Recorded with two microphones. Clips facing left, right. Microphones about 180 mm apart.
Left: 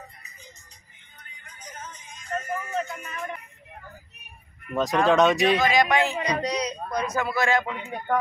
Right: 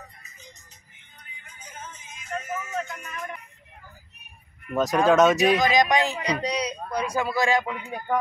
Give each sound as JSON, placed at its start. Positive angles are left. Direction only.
{"t": 1.4, "sound": "music", "side_deg": -10}
{"t": 4.7, "sound": "speech", "side_deg": 0}
{"t": 5.6, "sound": "speech", "side_deg": -15}